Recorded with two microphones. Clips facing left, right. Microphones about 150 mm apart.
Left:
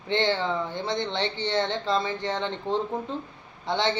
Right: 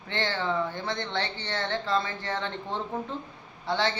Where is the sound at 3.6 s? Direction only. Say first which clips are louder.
Left 2 dB; 20° left (ahead or behind).